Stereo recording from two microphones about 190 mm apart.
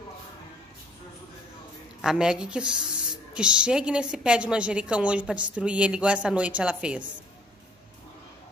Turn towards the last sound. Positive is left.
turn(degrees=-5)  # may be behind; listen again after turning